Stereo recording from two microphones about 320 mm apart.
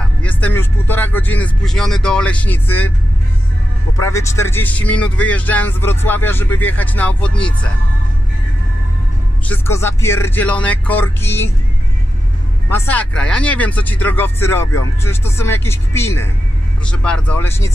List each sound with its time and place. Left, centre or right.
0.2 s speech: centre
4.0 s speech: centre
9.5 s speech: centre
12.6 s speech: centre